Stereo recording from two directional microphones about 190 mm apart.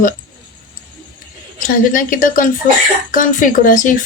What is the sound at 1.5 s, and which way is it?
Speech, 45° left (ahead or behind).